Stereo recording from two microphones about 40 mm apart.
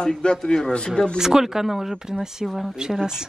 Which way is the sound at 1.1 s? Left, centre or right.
Centre.